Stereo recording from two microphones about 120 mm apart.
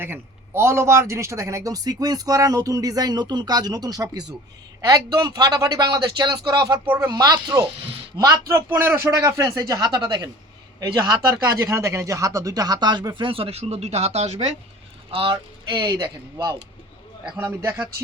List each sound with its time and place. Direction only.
0.0 s a man's voice: 20° right (ahead or behind); by 10.2 s 40° right (ahead or behind)
11.6 s speech: 25° right (ahead or behind); by 14.5 s 60° right (ahead or behind)
15.1 s speech: 45° right (ahead or behind)
17.3 s a man's voice: 20° right (ahead or behind)